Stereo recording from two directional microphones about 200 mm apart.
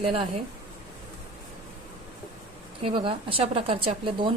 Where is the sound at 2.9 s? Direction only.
25° right (ahead or behind).